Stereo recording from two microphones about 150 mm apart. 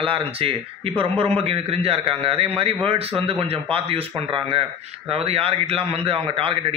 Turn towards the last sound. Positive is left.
turn(degrees=-40)  # may be behind; listen again after turning